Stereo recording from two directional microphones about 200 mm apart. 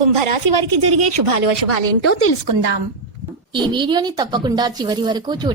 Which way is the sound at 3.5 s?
25° right (ahead or behind).